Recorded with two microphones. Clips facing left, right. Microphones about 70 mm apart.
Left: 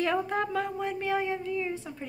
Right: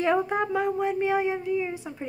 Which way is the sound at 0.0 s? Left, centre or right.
Right.